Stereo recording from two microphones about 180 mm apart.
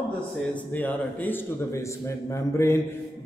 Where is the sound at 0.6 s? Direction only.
10° left (ahead or behind).